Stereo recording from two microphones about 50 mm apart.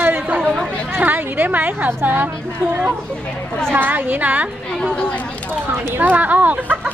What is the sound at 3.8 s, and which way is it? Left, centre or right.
Speech, right.